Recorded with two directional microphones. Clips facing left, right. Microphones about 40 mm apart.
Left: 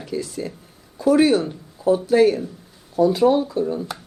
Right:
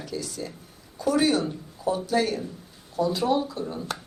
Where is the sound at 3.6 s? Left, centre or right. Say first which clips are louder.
Left 8 dB; centre.